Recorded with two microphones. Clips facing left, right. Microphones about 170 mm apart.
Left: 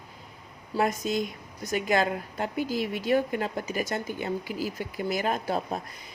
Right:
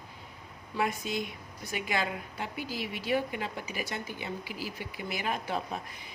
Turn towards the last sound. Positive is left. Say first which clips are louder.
# left 5 dB
turn(degrees=40)  # may be behind; listen again after turning